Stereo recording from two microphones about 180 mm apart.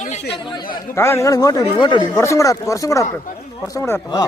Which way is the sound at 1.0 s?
15° left (ahead or behind).